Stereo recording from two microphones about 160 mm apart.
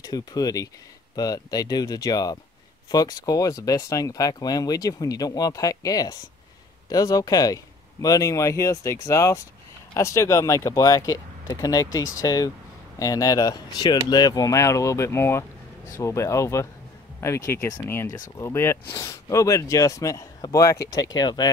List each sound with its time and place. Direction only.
0.0 s speech: 25° left (ahead or behind)